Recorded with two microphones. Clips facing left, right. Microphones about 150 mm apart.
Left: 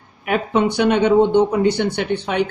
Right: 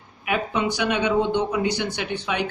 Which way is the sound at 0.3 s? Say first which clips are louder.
Left 6 dB; 55° left (ahead or behind).